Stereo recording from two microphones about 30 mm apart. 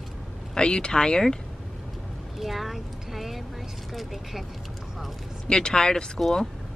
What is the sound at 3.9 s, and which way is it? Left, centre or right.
Speech, centre.